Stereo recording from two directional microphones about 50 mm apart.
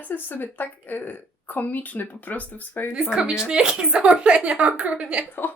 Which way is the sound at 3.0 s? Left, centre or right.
Centre.